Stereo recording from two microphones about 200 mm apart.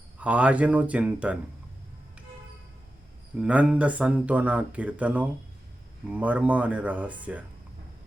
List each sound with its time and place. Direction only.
0.2 s speech: 5° right (ahead or behind)
3.3 s speech: 5° right (ahead or behind)